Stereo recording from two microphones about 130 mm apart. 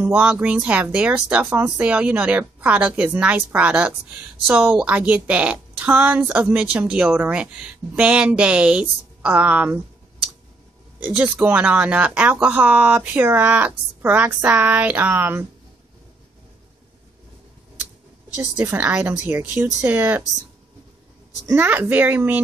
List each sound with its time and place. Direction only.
0.0 s speech: 10° right (ahead or behind)
11.0 s speech: 10° right (ahead or behind)
18.3 s speech: 20° right (ahead or behind)
21.5 s speech: 15° right (ahead or behind)